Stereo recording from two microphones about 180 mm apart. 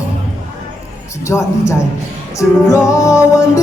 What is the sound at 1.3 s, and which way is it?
Music, 15° left (ahead or behind).